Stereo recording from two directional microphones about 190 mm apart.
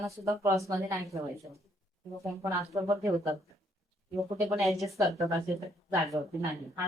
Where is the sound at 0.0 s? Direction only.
15° right (ahead or behind).